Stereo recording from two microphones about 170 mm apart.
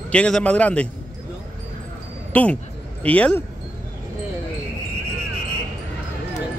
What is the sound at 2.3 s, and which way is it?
Speech, 10° left (ahead or behind).